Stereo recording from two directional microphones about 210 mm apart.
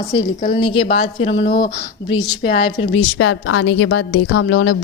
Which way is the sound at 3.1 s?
80° left.